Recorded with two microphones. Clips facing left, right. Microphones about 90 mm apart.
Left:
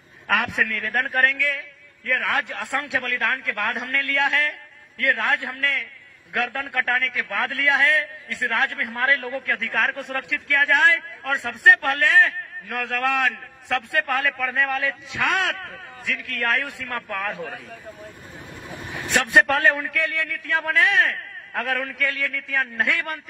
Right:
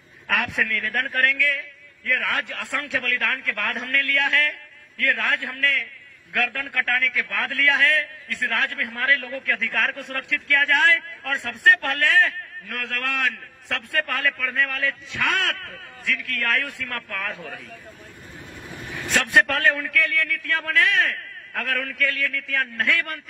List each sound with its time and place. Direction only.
0.7 s a man's voice: 15° left (ahead or behind)
18.5 s vehicle: 20° left (ahead or behind)
19.3 s a man's voice: 15° left (ahead or behind)